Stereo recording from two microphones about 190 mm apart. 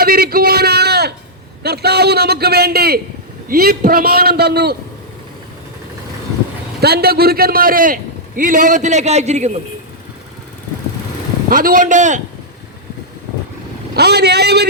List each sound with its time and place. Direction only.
0.0 s a sound: 50° right (ahead or behind)
1.6 s a man's voice: 60° right (ahead or behind)
6.8 s a man's voice: 55° right (ahead or behind); by 9.5 s 35° right (ahead or behind)
11.4 s a man's voice: 50° right (ahead or behind)
13.9 s a man's voice: 60° right (ahead or behind)